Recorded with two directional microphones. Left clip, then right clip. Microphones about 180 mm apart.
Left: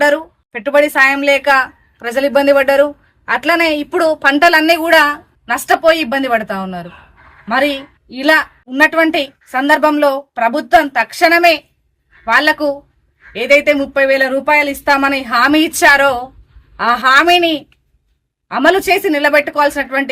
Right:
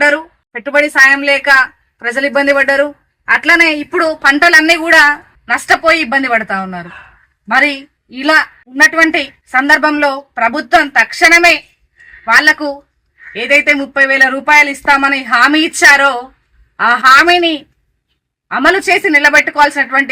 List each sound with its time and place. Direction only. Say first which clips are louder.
0.0 s a woman's voice: right 2 dB; 30° left (ahead or behind)
13.3 s a woman's voice: right 1 dB; 30° left (ahead or behind)